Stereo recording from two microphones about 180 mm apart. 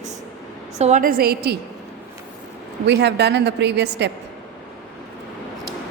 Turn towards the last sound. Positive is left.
turn(degrees=-70)  # may be behind; listen again after turning